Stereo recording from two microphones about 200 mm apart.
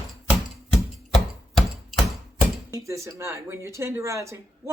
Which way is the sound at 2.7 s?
15° right (ahead or behind).